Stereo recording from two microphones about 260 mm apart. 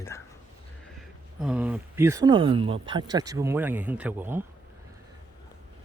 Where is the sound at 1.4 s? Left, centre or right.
Centre.